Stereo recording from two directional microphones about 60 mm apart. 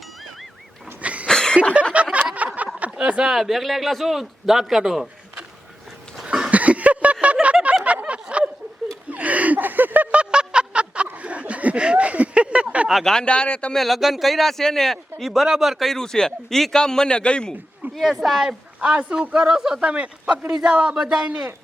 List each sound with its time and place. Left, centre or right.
1.0 s cough: right
1.3 s a sound: centre
1.7 s a sound: right
2.9 s speech: centre
3.3 s speech: centre
6.2 s a sound: centre
6.5 s a sound: right
12.9 s speech: centre
13.1 s speech: centre
13.7 s speech: centre
17.9 s speech: centre
18.8 s speech: right